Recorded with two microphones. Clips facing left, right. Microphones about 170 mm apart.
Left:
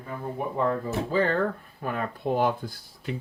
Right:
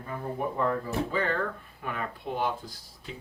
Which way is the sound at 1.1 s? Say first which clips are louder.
Left 7 dB; 35° left (ahead or behind).